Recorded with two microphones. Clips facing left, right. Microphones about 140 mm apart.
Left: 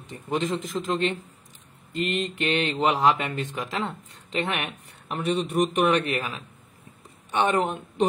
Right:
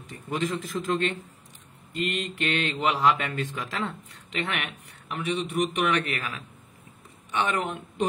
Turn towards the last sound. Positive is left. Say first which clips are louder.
# left 4 dB
turn(degrees=30)  # may be behind; listen again after turning